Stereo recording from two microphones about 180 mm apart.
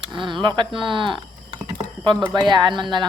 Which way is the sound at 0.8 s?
25° right (ahead or behind).